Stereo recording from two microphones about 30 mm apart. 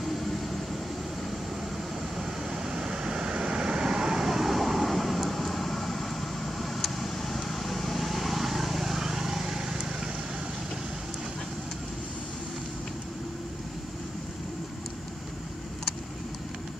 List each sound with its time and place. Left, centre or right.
2.1 s vehicle: centre